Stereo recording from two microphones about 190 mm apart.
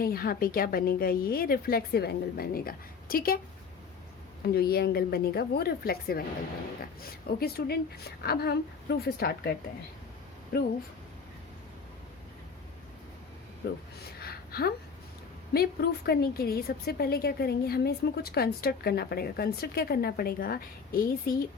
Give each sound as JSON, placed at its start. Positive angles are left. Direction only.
{"t": 0.0, "sound": "a woman's voice", "side_deg": 50}
{"t": 4.4, "sound": "a woman's voice", "side_deg": 55}
{"t": 14.2, "sound": "a sound", "side_deg": 55}
{"t": 15.5, "sound": "a woman's voice", "side_deg": 55}